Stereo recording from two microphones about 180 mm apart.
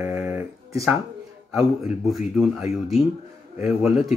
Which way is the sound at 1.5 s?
Centre (ahead or behind).